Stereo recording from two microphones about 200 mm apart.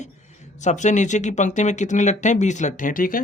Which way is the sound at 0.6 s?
35° left (ahead or behind).